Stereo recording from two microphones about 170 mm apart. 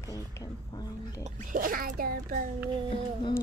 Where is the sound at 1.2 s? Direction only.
50° right (ahead or behind).